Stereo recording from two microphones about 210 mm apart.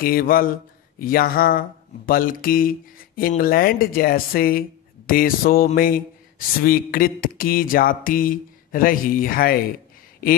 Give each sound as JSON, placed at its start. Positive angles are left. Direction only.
{"t": 0.0, "sound": "speech", "side_deg": 45}